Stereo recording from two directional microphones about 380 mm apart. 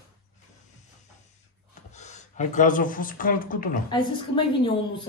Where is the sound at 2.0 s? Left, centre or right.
Centre.